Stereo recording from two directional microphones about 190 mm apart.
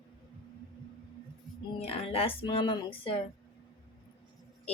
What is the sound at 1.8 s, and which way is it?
Speech, 30° left (ahead or behind).